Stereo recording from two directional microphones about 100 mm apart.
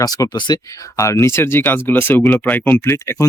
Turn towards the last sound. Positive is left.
turn(degrees=25)  # may be behind; listen again after turning